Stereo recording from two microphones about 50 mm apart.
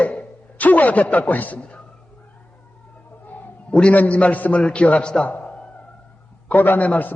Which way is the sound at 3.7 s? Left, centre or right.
Left.